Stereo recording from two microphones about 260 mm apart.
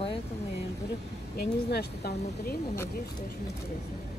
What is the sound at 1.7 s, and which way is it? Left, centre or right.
Speech, left.